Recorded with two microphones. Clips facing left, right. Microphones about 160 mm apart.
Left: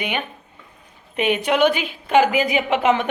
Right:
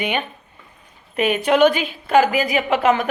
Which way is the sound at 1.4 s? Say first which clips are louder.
Right 4 dB; 10° left (ahead or behind).